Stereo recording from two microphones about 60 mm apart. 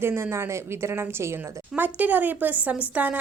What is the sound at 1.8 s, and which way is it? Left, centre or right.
Speech, right.